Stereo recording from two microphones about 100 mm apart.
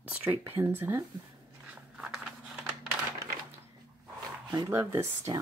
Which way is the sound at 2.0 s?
5° right (ahead or behind).